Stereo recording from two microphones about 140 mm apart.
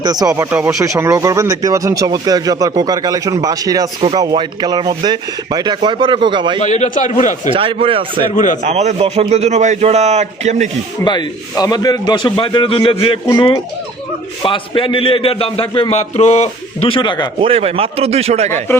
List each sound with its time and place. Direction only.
0.0 s speech: 30° right (ahead or behind)
6.6 s a man's voice: 55° left (ahead or behind)
7.5 s speech: 40° right (ahead or behind)
8.6 s speech: 55° right (ahead or behind)
11.0 s speech: 30° left (ahead or behind)
14.4 s speech: 35° left (ahead or behind)
17.4 s speech: 45° right (ahead or behind)